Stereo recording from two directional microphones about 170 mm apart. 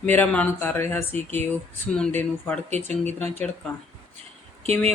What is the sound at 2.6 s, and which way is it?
Speech, 40° right (ahead or behind).